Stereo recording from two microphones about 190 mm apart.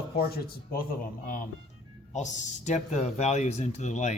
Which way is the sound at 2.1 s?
40° left (ahead or behind).